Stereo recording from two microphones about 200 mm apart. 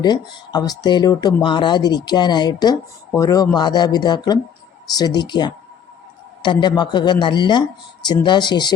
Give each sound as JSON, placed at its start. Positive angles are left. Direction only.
{"t": 0.0, "sound": "speech", "side_deg": 20}